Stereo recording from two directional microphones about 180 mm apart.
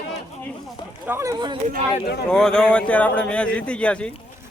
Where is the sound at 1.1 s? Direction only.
15° right (ahead or behind).